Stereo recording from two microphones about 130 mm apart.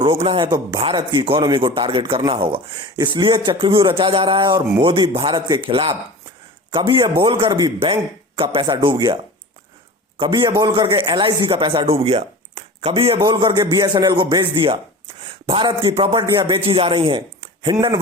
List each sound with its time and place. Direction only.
0.0 s speech: 45° right (ahead or behind)
10.2 s speech: 40° right (ahead or behind)
13.2 s a man's voice: 35° right (ahead or behind)